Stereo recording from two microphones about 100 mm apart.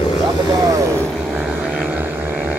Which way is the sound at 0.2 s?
40° right (ahead or behind).